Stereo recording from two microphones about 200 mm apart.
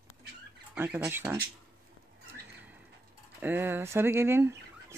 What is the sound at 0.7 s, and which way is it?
Speech, 10° right (ahead or behind).